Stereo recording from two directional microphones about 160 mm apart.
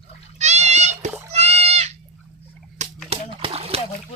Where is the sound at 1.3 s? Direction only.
40° right (ahead or behind).